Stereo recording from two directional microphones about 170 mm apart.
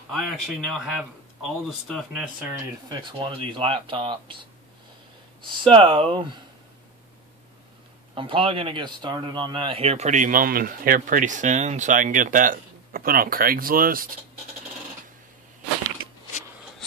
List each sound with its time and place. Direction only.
0.1 s speech: centre (ahead or behind)
2.9 s speech: 30° right (ahead or behind)
5.6 s speech: 30° right (ahead or behind)
8.1 s a man's voice: 30° right (ahead or behind); by 14.0 s 55° right (ahead or behind)